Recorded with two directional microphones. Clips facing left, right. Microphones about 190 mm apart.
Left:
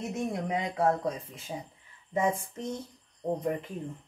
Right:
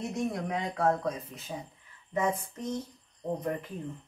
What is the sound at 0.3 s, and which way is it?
Speech, 20° left (ahead or behind).